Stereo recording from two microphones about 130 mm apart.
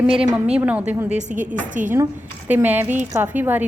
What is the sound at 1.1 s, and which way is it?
Speech, 70° right (ahead or behind).